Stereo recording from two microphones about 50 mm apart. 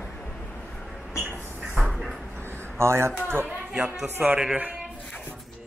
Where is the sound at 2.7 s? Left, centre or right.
Right.